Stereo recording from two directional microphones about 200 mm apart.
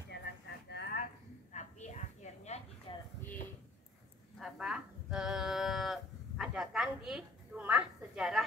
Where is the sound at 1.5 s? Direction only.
35° left (ahead or behind).